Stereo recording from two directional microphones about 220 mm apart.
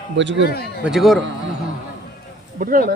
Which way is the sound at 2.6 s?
40° right (ahead or behind).